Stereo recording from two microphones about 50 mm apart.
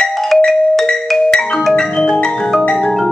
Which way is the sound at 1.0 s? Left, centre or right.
Centre.